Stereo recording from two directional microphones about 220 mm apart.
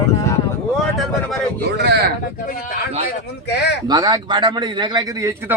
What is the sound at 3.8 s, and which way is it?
A man's voice, 20° right (ahead or behind).